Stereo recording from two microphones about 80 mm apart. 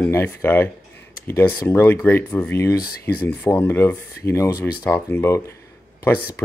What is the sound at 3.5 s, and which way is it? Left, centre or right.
Speech, left.